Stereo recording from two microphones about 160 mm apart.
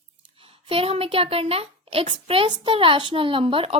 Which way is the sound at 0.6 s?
35° right (ahead or behind).